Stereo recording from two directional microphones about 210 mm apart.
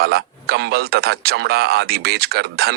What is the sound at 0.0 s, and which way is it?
Speech, 50° right (ahead or behind).